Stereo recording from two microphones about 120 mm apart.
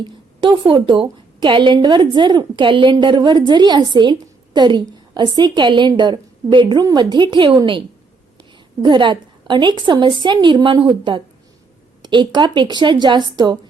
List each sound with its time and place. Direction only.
0.0 s a woman's voice: 40° right (ahead or behind)